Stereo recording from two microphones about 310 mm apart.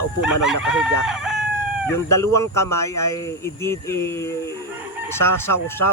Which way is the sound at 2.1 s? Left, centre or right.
Centre.